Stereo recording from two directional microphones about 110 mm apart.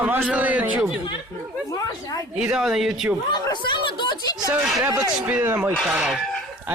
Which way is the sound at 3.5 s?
45° left (ahead or behind).